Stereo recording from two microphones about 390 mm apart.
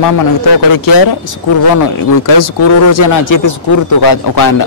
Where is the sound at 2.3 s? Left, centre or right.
Left.